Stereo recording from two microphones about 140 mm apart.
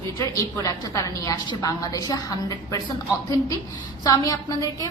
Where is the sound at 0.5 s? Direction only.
25° left (ahead or behind).